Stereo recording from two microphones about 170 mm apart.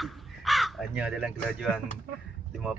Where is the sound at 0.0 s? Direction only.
Centre (ahead or behind).